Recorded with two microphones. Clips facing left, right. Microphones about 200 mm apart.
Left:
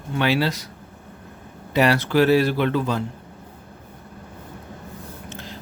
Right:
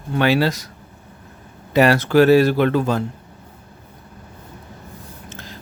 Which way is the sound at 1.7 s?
45° right (ahead or behind).